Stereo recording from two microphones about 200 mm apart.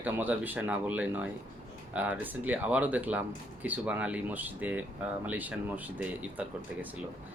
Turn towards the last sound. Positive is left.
turn(degrees=-10)  # may be behind; listen again after turning